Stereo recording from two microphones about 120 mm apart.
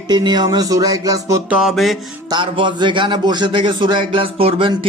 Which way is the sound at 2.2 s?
45° right (ahead or behind).